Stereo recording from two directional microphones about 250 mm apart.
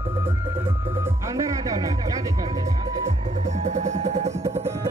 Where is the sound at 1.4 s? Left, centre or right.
Centre.